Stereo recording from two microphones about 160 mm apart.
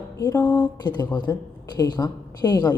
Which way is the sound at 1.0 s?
25° left (ahead or behind).